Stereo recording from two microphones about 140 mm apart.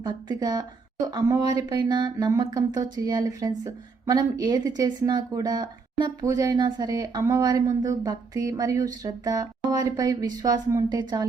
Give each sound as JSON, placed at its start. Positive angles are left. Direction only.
{"t": 0.0, "sound": "a woman's voice", "side_deg": -30}